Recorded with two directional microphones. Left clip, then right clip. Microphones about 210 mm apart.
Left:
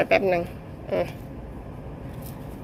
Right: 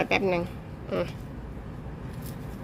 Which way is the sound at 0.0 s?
15° right (ahead or behind).